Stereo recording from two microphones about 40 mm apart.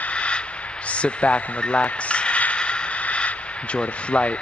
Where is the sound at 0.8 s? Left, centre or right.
Left.